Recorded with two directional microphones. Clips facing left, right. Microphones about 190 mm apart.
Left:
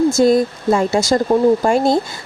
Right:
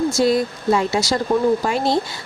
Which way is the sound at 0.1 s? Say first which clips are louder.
Left 5 dB; 50° left (ahead or behind).